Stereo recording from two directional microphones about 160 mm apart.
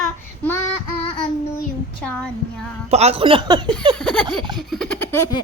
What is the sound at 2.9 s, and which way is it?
Speech, 40° right (ahead or behind).